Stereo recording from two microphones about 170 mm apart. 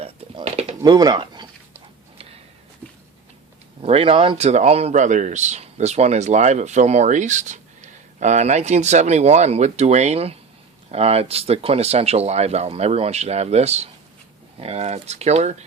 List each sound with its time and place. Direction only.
0.0 s a sound: 35° right (ahead or behind)
0.8 s speech: 25° right (ahead or behind)
3.8 s speech: 35° right (ahead or behind)